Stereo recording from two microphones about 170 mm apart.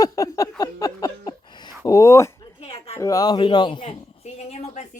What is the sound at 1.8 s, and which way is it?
Speech, 20° left (ahead or behind).